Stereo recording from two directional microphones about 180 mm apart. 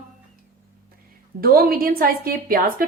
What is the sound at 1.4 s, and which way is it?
A woman's voice, 55° right (ahead or behind).